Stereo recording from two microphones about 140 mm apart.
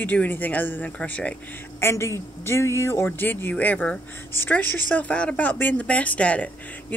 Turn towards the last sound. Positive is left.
turn(degrees=10)  # may be behind; listen again after turning